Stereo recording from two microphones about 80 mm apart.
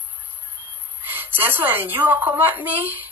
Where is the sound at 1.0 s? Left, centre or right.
Right.